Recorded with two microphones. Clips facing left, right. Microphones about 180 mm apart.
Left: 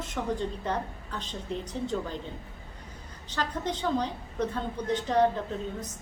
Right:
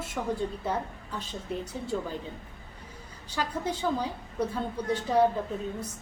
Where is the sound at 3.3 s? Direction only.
10° right (ahead or behind).